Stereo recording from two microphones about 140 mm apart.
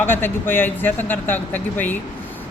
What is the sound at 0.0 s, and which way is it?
A man's voice, 15° left (ahead or behind).